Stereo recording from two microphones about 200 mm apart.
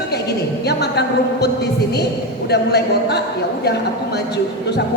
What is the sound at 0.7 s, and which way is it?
Speech, 55° left (ahead or behind).